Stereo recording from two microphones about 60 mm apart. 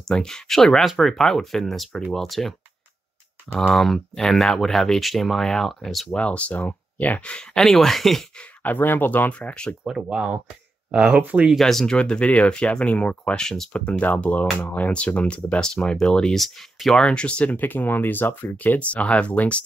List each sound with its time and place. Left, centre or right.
0.1 s speech: centre
3.5 s speech: centre
6.1 s speech: left
7.5 s speech: centre
8.6 s speech: left
10.0 s speech: centre
11.5 s speech: centre
13.7 s speech: left; by 17.0 s centre
17.0 s speech: centre